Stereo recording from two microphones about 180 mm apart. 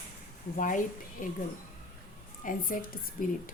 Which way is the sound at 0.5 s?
45° left (ahead or behind).